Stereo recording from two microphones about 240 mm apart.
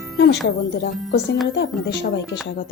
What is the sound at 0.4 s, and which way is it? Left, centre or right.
Speech, left.